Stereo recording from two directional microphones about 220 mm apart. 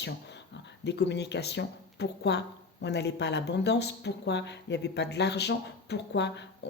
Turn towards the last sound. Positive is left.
turn(degrees=50)  # may be behind; listen again after turning